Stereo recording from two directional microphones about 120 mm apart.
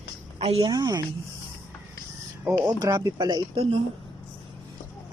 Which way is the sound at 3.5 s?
55° right (ahead or behind).